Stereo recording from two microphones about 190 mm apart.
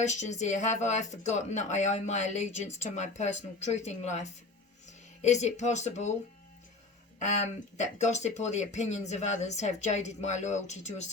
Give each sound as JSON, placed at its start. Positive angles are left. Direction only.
{"t": 0.0, "sound": "speech", "side_deg": 40}
{"t": 7.2, "sound": "speech", "side_deg": 40}